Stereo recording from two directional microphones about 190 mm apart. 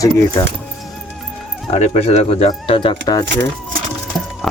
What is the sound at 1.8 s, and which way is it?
Speech, 35° left (ahead or behind).